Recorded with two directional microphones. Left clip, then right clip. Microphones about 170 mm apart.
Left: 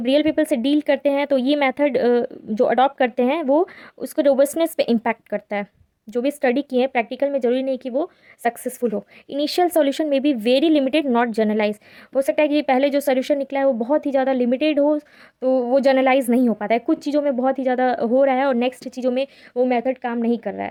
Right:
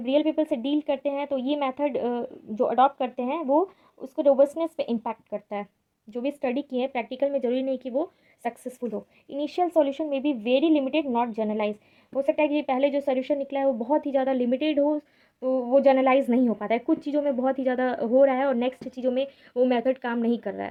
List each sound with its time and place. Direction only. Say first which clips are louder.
0.0 s a woman's voice: left 5 dB; 50° left (ahead or behind)
8.9 s speech: left 7 dB; 55° left (ahead or behind); by 19.6 s 35° left (ahead or behind)
19.6 s a woman's voice: left 3 dB; 20° left (ahead or behind)